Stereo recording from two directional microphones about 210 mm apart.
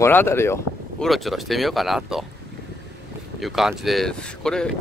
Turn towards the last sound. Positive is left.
turn(degrees=5)  # may be behind; listen again after turning